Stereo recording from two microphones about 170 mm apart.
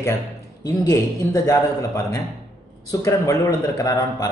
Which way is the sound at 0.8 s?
20° left (ahead or behind).